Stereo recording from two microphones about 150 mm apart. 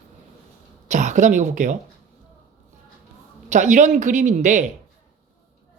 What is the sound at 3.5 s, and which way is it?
Speech, 55° right (ahead or behind).